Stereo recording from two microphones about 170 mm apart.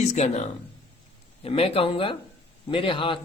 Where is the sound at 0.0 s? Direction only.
40° left (ahead or behind).